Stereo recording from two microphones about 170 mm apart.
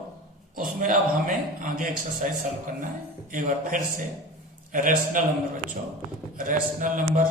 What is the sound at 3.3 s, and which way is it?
A man's voice, 50° right (ahead or behind).